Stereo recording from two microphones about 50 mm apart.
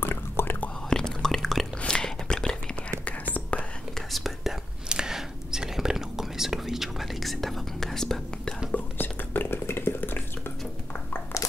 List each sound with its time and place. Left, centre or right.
0.0 s whispering: left
0.8 s whispering: centre
3.3 s whispering: left
4.1 s whispering: centre
4.8 s whispering: centre
8.7 s whispering: left
9.5 s a sound: left